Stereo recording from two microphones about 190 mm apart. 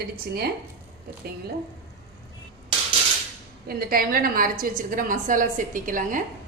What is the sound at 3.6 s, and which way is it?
A woman's voice, 50° right (ahead or behind).